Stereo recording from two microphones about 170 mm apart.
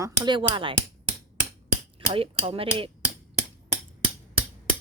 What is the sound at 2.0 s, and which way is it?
Speech, 35° right (ahead or behind).